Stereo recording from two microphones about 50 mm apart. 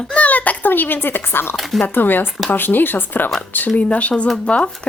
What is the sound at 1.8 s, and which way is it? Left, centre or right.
Speech, left.